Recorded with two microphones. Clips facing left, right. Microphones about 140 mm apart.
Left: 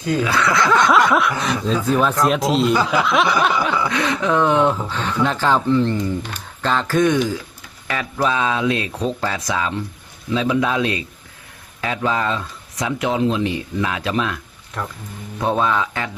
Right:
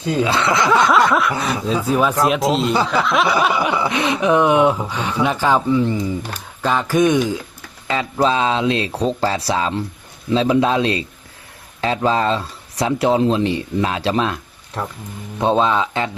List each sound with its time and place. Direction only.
0.0 s speech: 30° right (ahead or behind)
0.7 s snicker: centre (ahead or behind)
1.5 s speech: 10° right (ahead or behind)
2.2 s snicker: centre (ahead or behind)
3.4 s speech: 10° right (ahead or behind)